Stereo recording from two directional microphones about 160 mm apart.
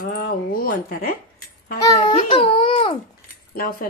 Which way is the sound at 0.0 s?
65° left (ahead or behind).